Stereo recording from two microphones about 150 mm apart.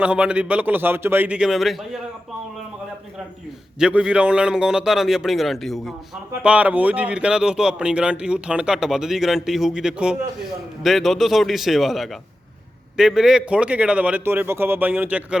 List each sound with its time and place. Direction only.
0.0 s speech: 10° right (ahead or behind)
3.8 s speech: 5° right (ahead or behind)